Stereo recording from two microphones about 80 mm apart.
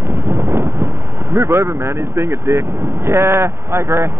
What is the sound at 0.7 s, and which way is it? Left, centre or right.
Speech, right.